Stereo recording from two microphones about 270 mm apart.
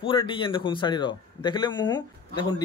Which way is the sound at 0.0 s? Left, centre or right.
Centre.